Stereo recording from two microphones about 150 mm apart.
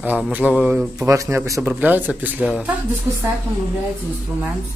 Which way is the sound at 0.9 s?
20° right (ahead or behind).